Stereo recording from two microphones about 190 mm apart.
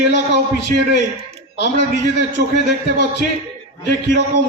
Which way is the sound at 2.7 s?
65° left (ahead or behind).